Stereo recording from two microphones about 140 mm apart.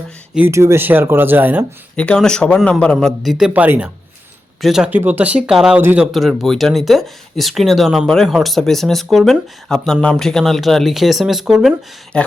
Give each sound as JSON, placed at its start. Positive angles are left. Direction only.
{"t": 0.3, "sound": "speech", "side_deg": -15}
{"t": 2.0, "sound": "speech", "side_deg": 5}
{"t": 6.1, "sound": "speech", "side_deg": 0}